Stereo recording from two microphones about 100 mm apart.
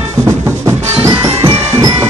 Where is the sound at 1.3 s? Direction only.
90° right.